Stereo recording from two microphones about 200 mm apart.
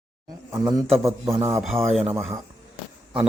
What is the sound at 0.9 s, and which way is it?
Speech, centre (ahead or behind).